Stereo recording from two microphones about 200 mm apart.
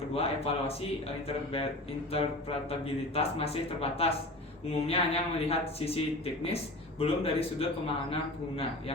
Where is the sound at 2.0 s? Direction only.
30° left (ahead or behind).